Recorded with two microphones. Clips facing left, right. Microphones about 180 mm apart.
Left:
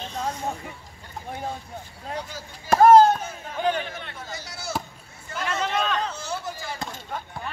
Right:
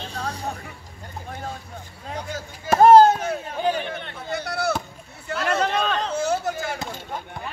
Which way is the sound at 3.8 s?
60° right (ahead or behind).